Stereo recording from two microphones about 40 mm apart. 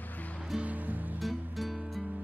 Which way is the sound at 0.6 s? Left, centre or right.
Right.